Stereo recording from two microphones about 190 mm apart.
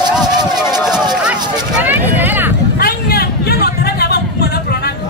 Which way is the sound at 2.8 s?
55° left (ahead or behind).